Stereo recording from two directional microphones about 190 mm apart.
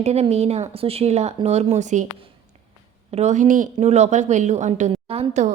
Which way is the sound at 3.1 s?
35° right (ahead or behind).